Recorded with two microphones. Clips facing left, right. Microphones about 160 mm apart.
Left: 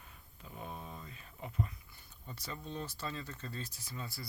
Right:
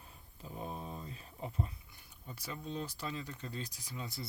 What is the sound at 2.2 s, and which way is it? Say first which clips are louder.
Speech: right 1 dB; 10° right (ahead or behind).